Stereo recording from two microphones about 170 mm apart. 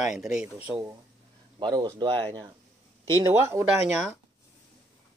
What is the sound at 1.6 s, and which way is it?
Speech, 25° right (ahead or behind).